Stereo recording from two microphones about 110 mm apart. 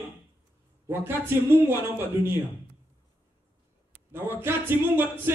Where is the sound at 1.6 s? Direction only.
20° right (ahead or behind).